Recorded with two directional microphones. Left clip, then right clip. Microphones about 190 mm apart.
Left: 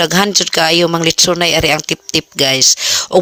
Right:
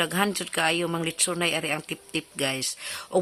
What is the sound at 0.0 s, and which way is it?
Speech, 40° left (ahead or behind).